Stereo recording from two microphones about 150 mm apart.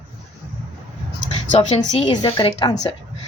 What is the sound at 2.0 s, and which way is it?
Speech, 30° left (ahead or behind).